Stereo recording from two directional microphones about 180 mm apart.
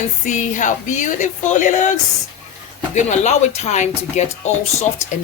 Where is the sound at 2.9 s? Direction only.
40° left (ahead or behind).